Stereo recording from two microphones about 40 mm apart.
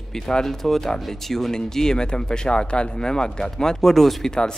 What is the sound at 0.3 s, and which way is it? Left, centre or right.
Speech, centre.